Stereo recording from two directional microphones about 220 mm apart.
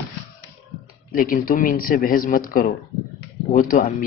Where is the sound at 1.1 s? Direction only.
40° left (ahead or behind).